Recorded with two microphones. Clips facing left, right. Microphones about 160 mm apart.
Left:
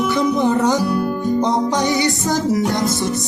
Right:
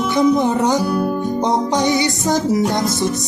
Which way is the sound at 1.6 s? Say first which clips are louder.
Right 1 dB; 20° right (ahead or behind).